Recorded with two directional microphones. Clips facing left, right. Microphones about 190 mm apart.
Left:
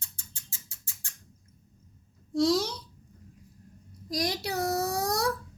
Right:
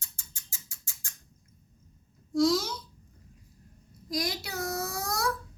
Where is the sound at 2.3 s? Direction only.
35° left (ahead or behind).